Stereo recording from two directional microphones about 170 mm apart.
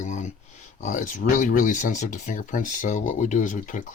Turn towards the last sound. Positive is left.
turn(degrees=50)  # may be behind; listen again after turning